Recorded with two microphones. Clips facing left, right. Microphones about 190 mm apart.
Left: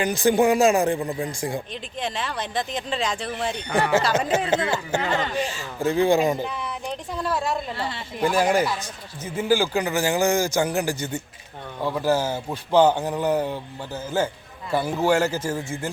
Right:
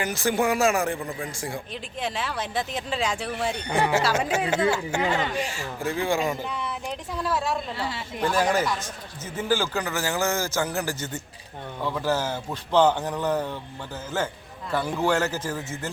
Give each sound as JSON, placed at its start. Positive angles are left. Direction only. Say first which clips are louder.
{"t": 0.0, "sound": "speech", "louder": "left 5 dB", "side_deg": 15}
{"t": 1.7, "sound": "speech", "louder": "left 1 dB", "side_deg": -5}
{"t": 5.5, "sound": "speech", "louder": "left 5 dB", "side_deg": 35}
{"t": 6.0, "sound": "speech", "louder": "left 7 dB", "side_deg": 20}
{"t": 6.4, "sound": "a woman's voice", "louder": "left 2 dB", "side_deg": 0}
{"t": 8.2, "sound": "speech", "louder": "left 3 dB", "side_deg": 10}